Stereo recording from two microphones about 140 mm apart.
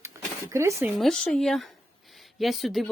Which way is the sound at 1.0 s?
5° left (ahead or behind).